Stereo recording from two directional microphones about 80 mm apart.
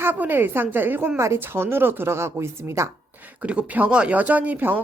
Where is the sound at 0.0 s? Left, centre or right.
Right.